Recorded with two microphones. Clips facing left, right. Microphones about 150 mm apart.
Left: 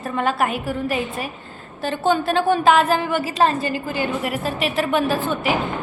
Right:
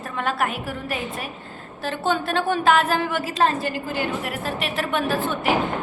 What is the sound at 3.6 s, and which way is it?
Speech, 65° right (ahead or behind).